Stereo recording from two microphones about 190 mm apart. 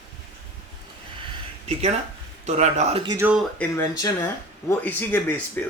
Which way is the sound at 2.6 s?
35° right (ahead or behind).